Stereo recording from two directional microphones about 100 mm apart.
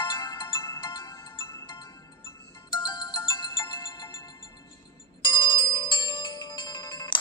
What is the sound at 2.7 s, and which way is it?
Ringtone, 50° left (ahead or behind).